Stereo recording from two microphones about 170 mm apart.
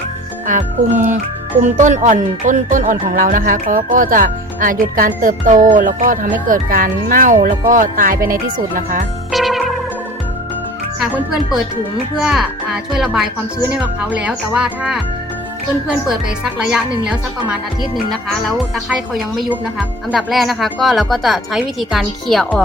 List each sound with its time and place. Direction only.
0.4 s music: 50° right (ahead or behind)
9.3 s music: centre (ahead or behind)
12.2 s speech: 5° right (ahead or behind)
17.1 s speech: 5° right (ahead or behind)